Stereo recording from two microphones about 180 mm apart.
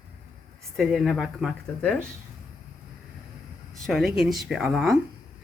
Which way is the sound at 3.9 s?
Centre (ahead or behind).